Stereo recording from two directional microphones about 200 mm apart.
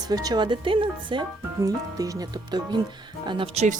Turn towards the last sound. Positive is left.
turn(degrees=-25)  # may be behind; listen again after turning